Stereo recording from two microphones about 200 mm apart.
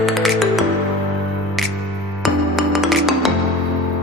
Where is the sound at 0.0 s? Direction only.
Centre (ahead or behind).